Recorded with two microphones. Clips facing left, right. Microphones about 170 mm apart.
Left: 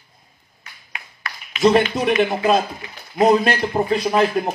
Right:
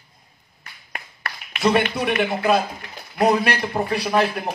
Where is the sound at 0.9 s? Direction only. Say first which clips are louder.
Right 1 dB; 60° right (ahead or behind).